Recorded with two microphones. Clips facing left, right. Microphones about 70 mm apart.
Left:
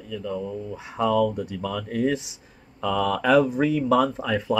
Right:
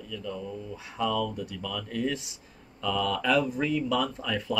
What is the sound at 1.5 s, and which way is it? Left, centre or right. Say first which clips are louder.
Speech: left 6 dB; left.